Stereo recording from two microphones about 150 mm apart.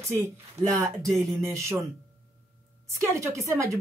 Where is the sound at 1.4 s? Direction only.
20° right (ahead or behind).